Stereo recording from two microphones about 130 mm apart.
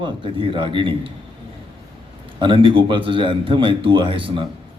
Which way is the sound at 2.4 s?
40° right (ahead or behind).